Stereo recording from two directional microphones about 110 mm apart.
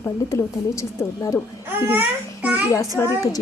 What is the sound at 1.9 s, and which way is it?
Speech, 15° right (ahead or behind).